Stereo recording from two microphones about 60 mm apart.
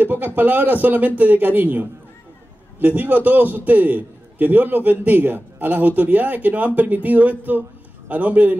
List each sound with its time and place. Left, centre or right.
0.0 s speech: right